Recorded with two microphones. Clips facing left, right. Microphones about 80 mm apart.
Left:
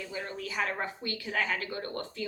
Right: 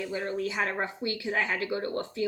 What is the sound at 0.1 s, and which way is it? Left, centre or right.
Speech, right.